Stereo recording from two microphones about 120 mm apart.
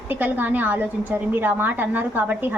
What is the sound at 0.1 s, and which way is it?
A woman's voice, 15° right (ahead or behind).